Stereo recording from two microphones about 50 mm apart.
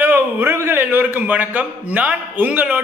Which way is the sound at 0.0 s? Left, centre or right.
Right.